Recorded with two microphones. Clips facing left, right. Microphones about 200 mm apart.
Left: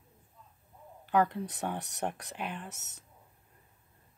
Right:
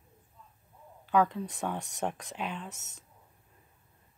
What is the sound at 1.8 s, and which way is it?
Speech, 65° left (ahead or behind).